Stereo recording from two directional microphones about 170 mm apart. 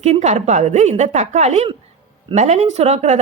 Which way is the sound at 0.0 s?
40° right (ahead or behind).